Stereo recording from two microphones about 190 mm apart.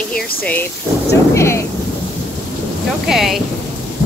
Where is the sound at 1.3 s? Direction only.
15° left (ahead or behind).